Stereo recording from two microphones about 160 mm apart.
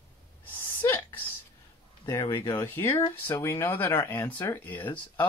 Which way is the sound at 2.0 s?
20° left (ahead or behind).